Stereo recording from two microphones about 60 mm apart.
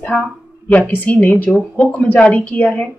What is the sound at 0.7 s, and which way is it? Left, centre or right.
A woman's voice, left.